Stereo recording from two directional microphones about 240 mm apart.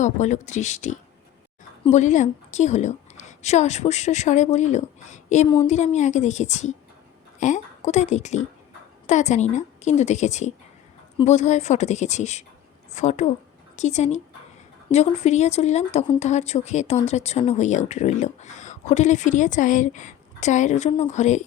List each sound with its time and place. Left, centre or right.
0.0 s speech: left